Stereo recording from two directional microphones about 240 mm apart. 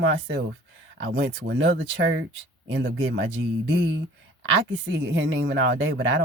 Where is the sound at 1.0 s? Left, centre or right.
Right.